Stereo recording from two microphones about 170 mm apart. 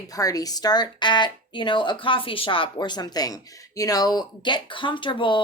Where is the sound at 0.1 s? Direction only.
20° left (ahead or behind).